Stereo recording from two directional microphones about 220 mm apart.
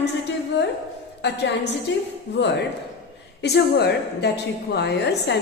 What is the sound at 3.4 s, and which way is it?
A woman's voice, 50° left (ahead or behind).